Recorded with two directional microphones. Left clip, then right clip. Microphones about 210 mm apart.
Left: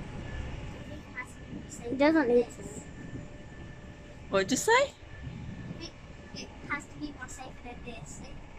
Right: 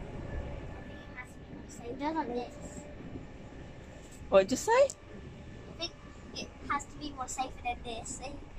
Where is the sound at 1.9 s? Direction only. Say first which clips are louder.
Left 10 dB; 50° left (ahead or behind).